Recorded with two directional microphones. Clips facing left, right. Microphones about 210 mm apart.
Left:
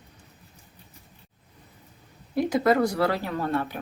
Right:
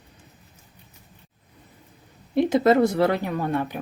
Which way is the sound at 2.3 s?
25° right (ahead or behind).